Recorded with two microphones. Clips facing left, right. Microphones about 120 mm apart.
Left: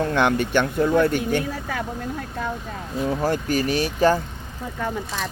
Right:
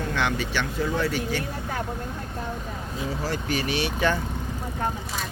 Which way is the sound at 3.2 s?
45° left (ahead or behind).